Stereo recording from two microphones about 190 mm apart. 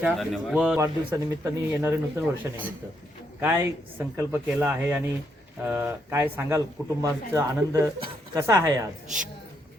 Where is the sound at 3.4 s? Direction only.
10° right (ahead or behind).